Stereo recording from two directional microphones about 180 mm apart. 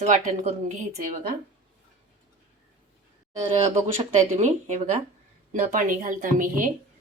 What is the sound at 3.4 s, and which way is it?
A woman's voice, 35° right (ahead or behind).